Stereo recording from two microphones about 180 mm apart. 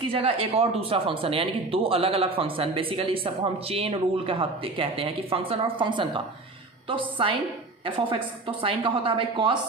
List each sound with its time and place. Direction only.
0.1 s a woman's voice: 30° right (ahead or behind)